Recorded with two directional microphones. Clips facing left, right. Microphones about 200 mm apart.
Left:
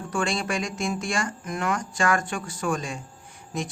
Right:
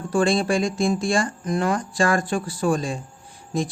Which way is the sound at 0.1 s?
35° right (ahead or behind).